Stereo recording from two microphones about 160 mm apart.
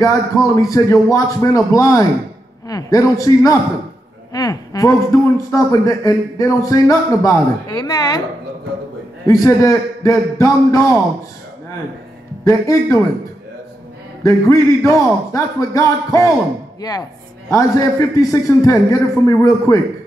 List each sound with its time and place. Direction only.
0.0 s a man's voice: 20° left (ahead or behind)
9.3 s a man's voice: 20° left (ahead or behind)
12.4 s a man's voice: 20° left (ahead or behind)
14.2 s a man's voice: 20° left (ahead or behind)